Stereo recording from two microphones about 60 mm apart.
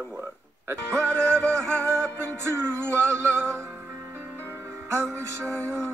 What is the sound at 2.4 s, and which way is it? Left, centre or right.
Music, right.